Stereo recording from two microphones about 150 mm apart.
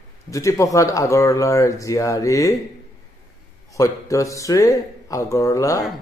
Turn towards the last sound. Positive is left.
turn(degrees=20)  # may be behind; listen again after turning